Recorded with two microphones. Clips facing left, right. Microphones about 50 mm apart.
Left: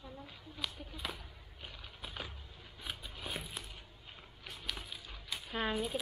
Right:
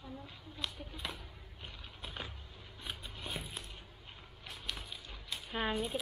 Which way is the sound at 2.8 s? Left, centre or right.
Centre.